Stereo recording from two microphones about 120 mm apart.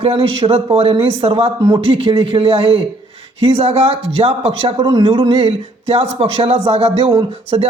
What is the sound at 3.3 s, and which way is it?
Speech, 55° right (ahead or behind).